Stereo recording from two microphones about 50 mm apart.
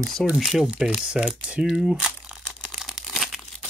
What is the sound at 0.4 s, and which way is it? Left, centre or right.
Speech, centre.